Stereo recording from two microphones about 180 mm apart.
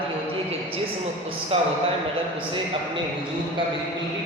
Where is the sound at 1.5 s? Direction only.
35° right (ahead or behind).